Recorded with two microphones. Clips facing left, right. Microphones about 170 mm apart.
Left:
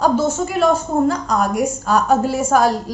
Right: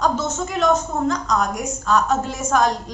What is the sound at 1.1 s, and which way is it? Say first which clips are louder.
A woman's voice: left 3 dB; 10° left (ahead or behind).